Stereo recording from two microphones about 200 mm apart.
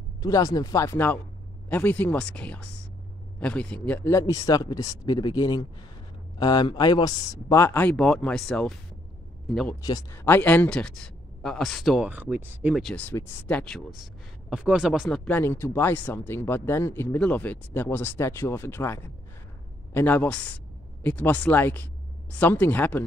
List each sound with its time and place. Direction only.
0.2 s speech: 15° left (ahead or behind)
9.8 s speech: 15° left (ahead or behind)